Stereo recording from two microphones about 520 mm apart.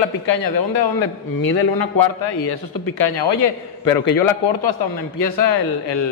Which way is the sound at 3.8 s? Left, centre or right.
Left.